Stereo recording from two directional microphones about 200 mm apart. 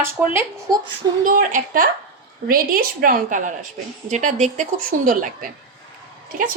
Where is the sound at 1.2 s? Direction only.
40° right (ahead or behind).